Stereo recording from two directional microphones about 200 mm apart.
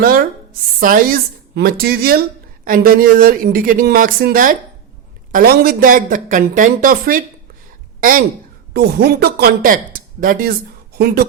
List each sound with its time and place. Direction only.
0.0 s speech: 45° right (ahead or behind)
8.7 s speech: 55° right (ahead or behind)